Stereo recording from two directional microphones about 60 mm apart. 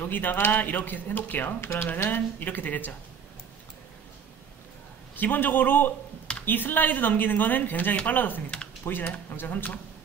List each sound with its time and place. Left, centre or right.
0.0 s speech: left
1.6 s speech: left
2.0 s speech: left
5.1 s speech: left